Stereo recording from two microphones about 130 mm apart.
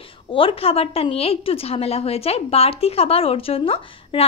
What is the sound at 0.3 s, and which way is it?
A woman's voice, 45° left (ahead or behind).